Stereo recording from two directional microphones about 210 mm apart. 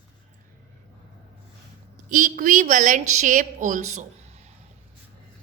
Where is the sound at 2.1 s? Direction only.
40° right (ahead or behind).